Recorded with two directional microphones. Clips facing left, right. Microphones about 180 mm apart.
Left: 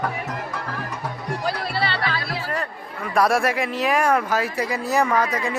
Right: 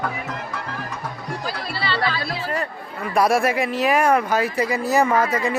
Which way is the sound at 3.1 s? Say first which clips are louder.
Right 1 dB; centre (ahead or behind).